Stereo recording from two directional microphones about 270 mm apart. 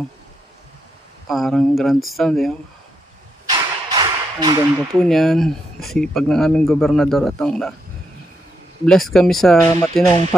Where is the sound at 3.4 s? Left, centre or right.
Centre.